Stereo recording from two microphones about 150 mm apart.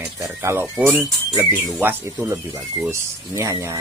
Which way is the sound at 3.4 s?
20° right (ahead or behind).